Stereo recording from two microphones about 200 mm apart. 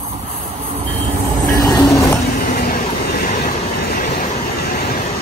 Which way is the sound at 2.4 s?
45° left (ahead or behind).